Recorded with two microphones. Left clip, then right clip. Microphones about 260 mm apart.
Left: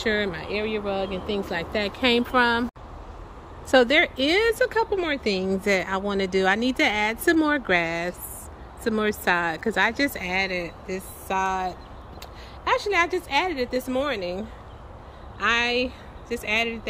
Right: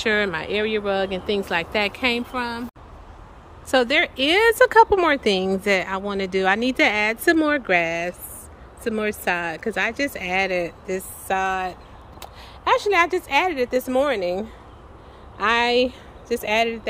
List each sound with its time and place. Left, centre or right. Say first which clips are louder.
0.0 s speech: right 4 dB; centre
3.7 s speech: even; centre